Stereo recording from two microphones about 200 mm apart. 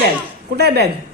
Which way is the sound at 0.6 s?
55° right (ahead or behind).